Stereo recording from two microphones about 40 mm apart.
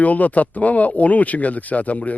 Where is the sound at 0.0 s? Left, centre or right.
Left.